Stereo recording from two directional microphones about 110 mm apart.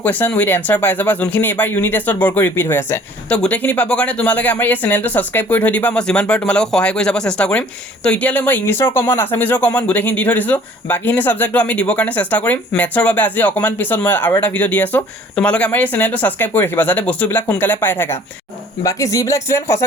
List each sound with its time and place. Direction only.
0.0 s speech: 15° left (ahead or behind)
18.8 s speech: 30° left (ahead or behind)